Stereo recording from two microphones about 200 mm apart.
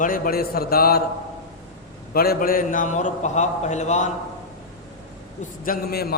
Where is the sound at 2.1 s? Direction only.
50° left (ahead or behind).